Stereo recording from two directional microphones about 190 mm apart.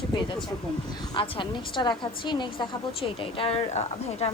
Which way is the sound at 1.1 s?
25° left (ahead or behind).